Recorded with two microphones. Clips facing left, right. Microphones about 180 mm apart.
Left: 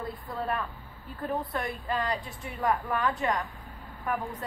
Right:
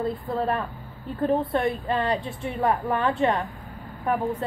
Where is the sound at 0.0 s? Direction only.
25° right (ahead or behind).